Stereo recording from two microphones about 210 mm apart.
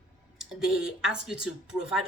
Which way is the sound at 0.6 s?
5° right (ahead or behind).